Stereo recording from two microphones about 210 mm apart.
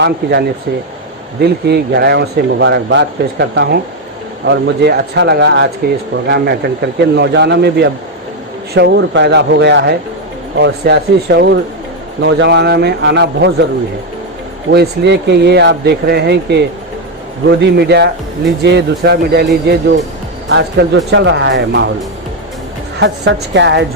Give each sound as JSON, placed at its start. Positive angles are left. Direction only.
{"t": 0.0, "sound": "speech", "side_deg": -50}
{"t": 14.7, "sound": "speech", "side_deg": -55}
{"t": 23.0, "sound": "speech", "side_deg": -55}